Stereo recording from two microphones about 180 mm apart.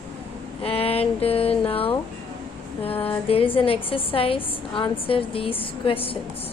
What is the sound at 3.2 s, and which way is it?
A woman's voice, 30° left (ahead or behind).